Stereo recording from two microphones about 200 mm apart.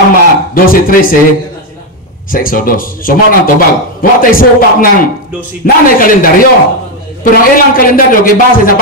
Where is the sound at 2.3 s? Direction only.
45° left (ahead or behind).